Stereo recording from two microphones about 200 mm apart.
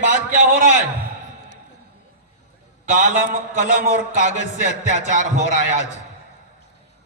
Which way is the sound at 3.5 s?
40° right (ahead or behind).